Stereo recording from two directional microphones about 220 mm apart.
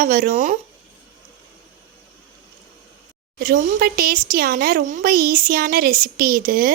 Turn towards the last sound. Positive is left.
turn(degrees=-40)  # may be behind; listen again after turning